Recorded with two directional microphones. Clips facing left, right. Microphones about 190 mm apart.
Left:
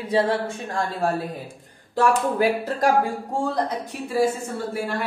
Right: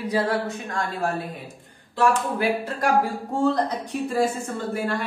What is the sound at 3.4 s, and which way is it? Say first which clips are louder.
Speech: right 3 dB; 10° left (ahead or behind).